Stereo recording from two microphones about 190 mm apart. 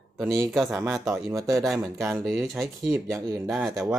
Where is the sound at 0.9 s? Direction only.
Centre (ahead or behind).